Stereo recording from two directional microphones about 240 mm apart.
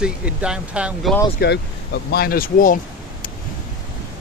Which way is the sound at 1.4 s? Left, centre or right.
Left.